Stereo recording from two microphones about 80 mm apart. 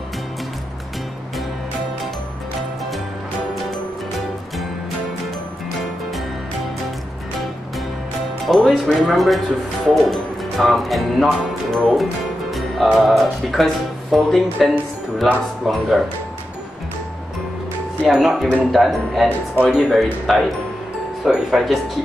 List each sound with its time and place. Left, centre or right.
8.5 s speech: centre
18.0 s speech: centre
19.2 s speech: right
19.7 s speech: centre